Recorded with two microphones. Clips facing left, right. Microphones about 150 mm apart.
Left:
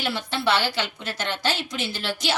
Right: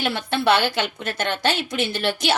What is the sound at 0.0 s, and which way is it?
A woman's voice, 60° right (ahead or behind).